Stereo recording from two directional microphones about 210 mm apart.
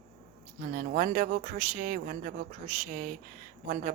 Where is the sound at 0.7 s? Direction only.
35° right (ahead or behind).